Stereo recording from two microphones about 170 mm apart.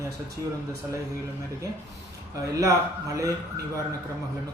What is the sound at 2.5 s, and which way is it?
Speech, 20° right (ahead or behind).